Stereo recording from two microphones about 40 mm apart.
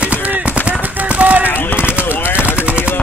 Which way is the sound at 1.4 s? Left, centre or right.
Left.